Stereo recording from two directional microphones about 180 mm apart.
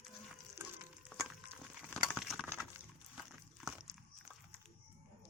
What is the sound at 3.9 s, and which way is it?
Biting, 15° right (ahead or behind).